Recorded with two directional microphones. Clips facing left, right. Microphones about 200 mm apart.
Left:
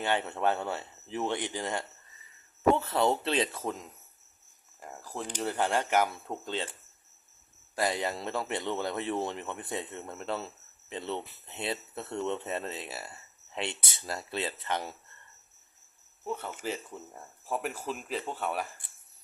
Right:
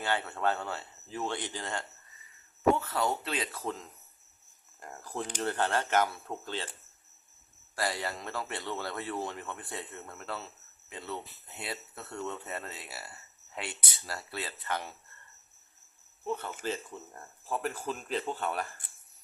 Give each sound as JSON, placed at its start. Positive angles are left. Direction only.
{"t": 0.0, "sound": "speech", "side_deg": 20}
{"t": 2.7, "sound": "speech", "side_deg": 30}
{"t": 4.8, "sound": "speech", "side_deg": 0}
{"t": 7.8, "sound": "speech", "side_deg": 20}
{"t": 16.2, "sound": "speech", "side_deg": 10}